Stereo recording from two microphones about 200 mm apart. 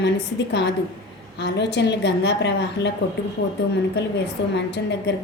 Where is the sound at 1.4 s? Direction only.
60° left (ahead or behind).